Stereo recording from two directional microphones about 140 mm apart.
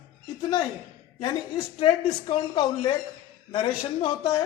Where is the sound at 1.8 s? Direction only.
35° left (ahead or behind).